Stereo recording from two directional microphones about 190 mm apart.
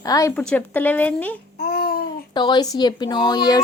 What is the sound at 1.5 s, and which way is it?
Babbling, 55° left (ahead or behind).